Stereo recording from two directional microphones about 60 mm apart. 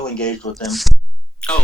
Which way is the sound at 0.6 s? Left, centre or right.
Centre.